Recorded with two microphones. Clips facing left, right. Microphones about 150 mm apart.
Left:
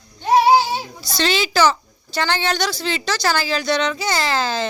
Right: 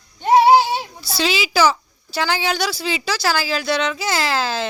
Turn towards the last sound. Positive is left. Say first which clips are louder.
# even
turn(degrees=-5)  # may be behind; listen again after turning